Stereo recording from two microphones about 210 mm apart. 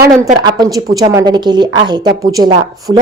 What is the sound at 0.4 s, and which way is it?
A woman's voice, 20° right (ahead or behind).